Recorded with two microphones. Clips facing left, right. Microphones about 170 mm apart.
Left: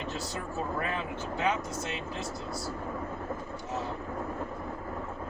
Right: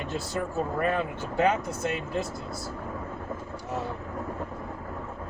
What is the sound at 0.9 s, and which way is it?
Speech, 55° right (ahead or behind).